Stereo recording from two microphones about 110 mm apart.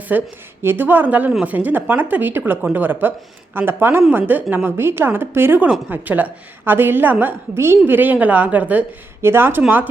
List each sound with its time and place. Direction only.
0.1 s a woman's voice: 15° right (ahead or behind)